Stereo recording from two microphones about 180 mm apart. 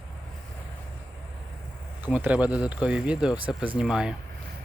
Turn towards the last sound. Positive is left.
turn(degrees=-5)  # may be behind; listen again after turning